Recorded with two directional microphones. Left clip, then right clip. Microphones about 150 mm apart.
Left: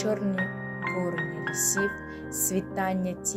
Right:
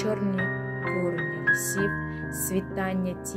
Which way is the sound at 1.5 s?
20° right (ahead or behind).